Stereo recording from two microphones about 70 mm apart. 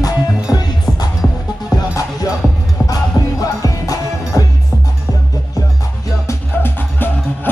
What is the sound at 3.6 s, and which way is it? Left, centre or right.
Music, left.